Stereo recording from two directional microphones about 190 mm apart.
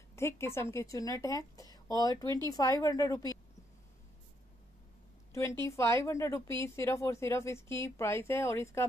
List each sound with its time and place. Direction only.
0.1 s a woman's voice: 15° left (ahead or behind)
5.3 s a woman's voice: 15° left (ahead or behind)